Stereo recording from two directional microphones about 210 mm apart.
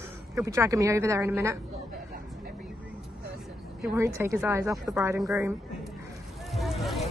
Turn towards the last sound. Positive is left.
turn(degrees=0)  # may be behind; listen again after turning